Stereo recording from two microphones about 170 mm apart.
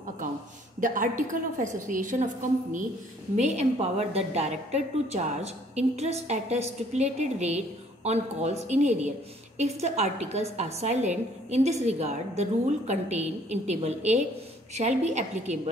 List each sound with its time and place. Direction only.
0.7 s a woman's voice: 50° right (ahead or behind)
3.3 s a woman's voice: 40° right (ahead or behind)